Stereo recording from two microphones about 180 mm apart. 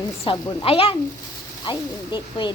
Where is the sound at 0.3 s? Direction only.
30° left (ahead or behind).